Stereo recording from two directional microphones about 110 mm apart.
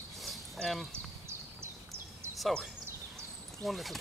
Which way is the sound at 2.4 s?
5° left (ahead or behind).